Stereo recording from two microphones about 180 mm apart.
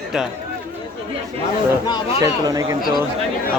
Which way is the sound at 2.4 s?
20° right (ahead or behind).